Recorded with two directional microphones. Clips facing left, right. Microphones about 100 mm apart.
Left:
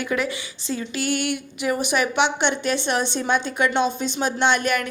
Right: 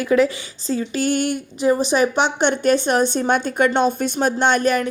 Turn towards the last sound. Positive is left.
turn(degrees=-35)  # may be behind; listen again after turning